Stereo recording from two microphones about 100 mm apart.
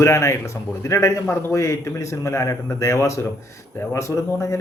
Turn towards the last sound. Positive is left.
turn(degrees=30)  # may be behind; listen again after turning